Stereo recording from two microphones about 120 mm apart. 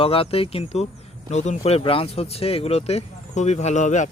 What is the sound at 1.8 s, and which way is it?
Speech, 50° left (ahead or behind).